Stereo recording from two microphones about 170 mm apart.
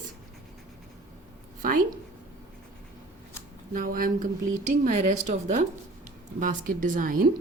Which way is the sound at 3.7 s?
55° right (ahead or behind).